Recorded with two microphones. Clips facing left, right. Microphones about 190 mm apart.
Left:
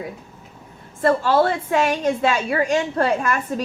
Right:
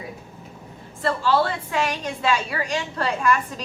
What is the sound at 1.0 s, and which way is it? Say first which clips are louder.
A woman's voice: left 4 dB; 50° left (ahead or behind).